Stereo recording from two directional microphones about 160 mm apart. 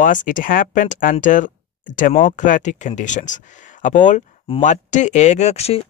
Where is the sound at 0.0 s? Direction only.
55° left (ahead or behind).